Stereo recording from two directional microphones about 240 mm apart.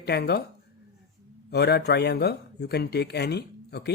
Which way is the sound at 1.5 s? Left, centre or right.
Left.